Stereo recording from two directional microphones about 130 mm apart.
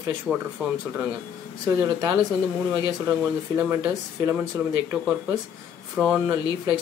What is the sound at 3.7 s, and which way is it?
Speech, 20° right (ahead or behind).